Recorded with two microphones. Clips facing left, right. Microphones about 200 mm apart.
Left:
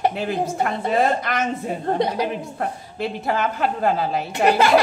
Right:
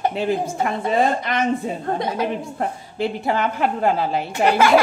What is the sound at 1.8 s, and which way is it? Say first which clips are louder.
Speech: left 2 dB; 35° left (ahead or behind).